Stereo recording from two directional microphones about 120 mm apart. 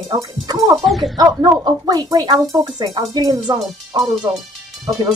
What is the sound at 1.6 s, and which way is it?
Speech, 35° right (ahead or behind).